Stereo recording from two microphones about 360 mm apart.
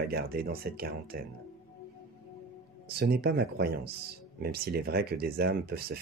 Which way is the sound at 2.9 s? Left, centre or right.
Right.